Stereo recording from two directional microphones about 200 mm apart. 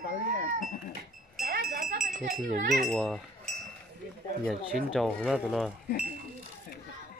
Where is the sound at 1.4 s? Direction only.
50° right (ahead or behind).